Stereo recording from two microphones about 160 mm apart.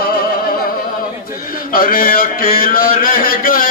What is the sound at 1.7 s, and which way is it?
Mantra, 65° left (ahead or behind).